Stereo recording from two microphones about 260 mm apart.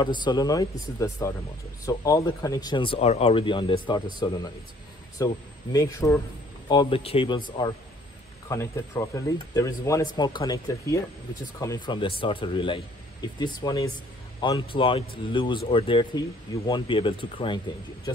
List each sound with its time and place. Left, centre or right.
0.0 s speech: centre
8.5 s speech: centre